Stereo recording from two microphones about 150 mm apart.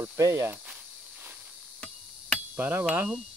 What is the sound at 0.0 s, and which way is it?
Speech, 20° right (ahead or behind).